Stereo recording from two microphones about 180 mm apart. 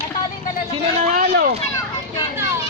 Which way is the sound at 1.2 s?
55° right (ahead or behind).